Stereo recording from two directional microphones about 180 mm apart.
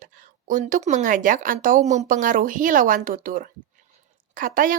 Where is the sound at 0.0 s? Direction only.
50° right (ahead or behind).